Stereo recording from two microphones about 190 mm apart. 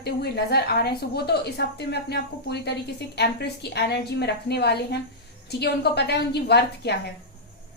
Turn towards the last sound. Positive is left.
turn(degrees=60)  # may be behind; listen again after turning